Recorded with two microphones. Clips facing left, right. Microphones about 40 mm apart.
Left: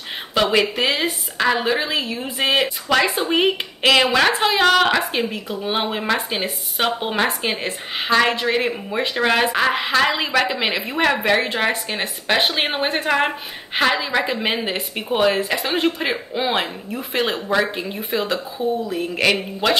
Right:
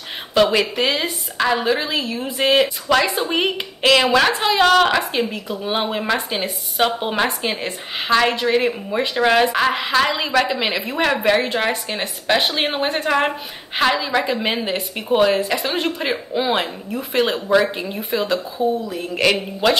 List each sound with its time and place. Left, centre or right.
0.3 s a woman's voice: centre